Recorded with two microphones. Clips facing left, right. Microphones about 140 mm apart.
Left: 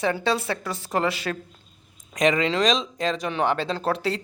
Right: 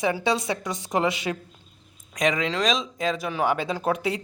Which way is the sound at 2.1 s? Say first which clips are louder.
Left 3 dB; centre (ahead or behind).